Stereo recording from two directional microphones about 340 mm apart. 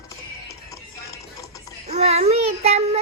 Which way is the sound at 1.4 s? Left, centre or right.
Centre.